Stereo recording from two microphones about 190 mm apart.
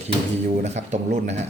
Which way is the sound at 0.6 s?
35° right (ahead or behind).